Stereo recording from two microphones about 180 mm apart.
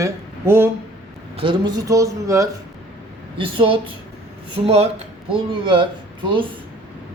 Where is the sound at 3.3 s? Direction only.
30° right (ahead or behind).